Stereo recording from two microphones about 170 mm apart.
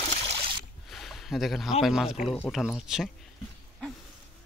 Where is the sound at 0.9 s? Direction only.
Centre (ahead or behind).